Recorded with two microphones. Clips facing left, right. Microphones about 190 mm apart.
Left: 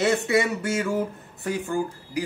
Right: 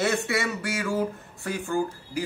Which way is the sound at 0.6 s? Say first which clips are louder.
Left 4 dB; 25° left (ahead or behind).